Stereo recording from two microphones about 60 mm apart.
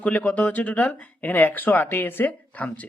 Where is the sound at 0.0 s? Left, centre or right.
Left.